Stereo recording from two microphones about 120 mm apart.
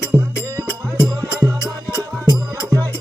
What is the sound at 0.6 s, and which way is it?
Music, 25° right (ahead or behind).